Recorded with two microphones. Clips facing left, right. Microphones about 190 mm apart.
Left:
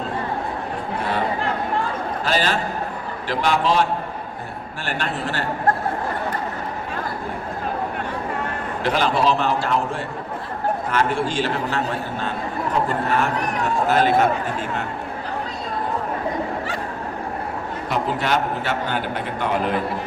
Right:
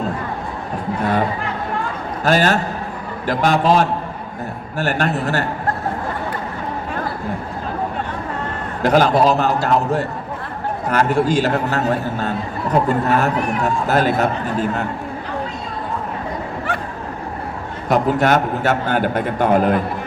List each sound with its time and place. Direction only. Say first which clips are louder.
2.2 s a man's voice: right 7 dB; 45° right (ahead or behind)
8.8 s a man's voice: right 6 dB; 45° right (ahead or behind)
17.8 s a man's voice: right 8 dB; 45° right (ahead or behind)